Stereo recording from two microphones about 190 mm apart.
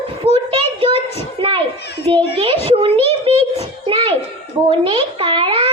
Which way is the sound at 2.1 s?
30° right (ahead or behind).